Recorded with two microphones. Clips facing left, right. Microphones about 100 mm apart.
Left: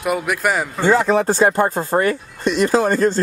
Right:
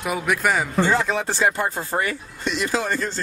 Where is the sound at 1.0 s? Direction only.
45° left (ahead or behind).